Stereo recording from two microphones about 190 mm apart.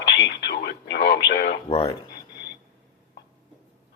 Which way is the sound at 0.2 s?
65° left (ahead or behind).